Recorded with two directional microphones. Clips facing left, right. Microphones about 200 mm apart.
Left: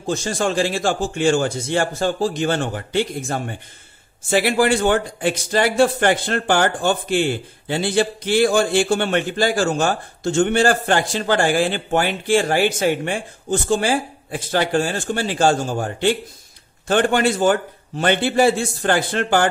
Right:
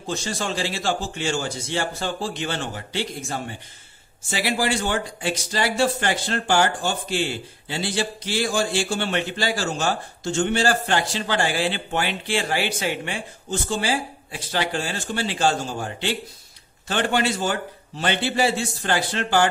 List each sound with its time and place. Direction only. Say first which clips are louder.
0.0 s speech: left 6 dB; 45° left (ahead or behind)